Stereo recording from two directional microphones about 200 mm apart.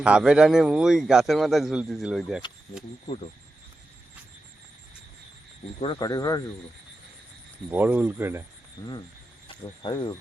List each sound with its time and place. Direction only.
0.0 s a man's voice: 5° right (ahead or behind)
5.8 s speech: 25° left (ahead or behind)
7.7 s speech: 10° right (ahead or behind)
9.8 s speech: 20° left (ahead or behind)